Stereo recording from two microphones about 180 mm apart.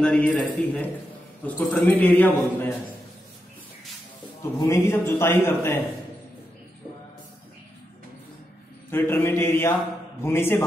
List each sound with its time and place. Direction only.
0.0 s a man's voice: 5° left (ahead or behind)
4.6 s a man's voice: 15° left (ahead or behind)
8.9 s a man's voice: 10° left (ahead or behind)